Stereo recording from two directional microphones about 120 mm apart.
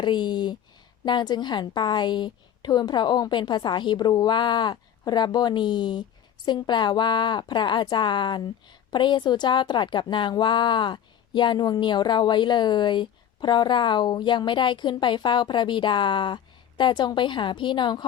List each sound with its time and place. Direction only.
0.0 s a woman's voice: 40° left (ahead or behind)